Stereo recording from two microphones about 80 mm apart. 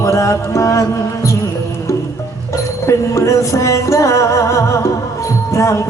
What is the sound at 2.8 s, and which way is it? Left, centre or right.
Music, left.